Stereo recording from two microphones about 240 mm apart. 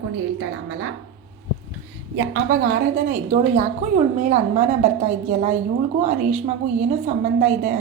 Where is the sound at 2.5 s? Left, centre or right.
Right.